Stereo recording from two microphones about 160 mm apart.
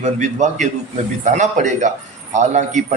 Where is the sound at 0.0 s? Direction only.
50° right (ahead or behind).